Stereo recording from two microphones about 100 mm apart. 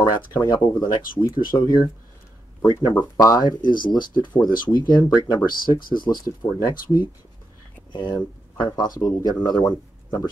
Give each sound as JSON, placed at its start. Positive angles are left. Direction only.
{"t": 0.4, "sound": "speech", "side_deg": 45}